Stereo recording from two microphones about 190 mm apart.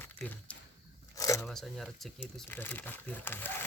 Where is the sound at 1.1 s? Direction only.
15° left (ahead or behind).